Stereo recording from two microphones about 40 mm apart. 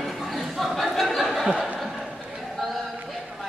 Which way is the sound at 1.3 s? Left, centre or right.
Centre.